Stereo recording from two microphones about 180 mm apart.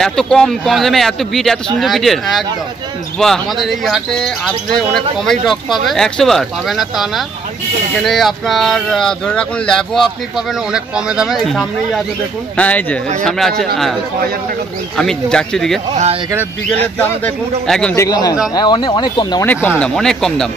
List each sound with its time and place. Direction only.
0.0 s speech: 5° left (ahead or behind)
15.0 s speech: 5° left (ahead or behind)
16.8 s speech: 10° left (ahead or behind)
17.9 s speech: 20° left (ahead or behind)
19.4 s speech: 10° left (ahead or behind)